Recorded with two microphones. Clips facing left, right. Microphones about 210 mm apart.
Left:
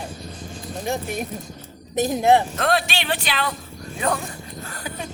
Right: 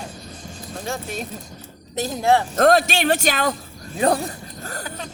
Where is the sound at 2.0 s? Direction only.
20° left (ahead or behind).